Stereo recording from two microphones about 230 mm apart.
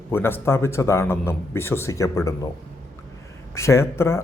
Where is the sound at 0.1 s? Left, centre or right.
Centre.